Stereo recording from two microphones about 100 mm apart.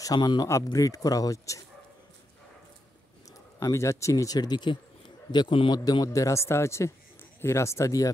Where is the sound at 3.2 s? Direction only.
30° left (ahead or behind).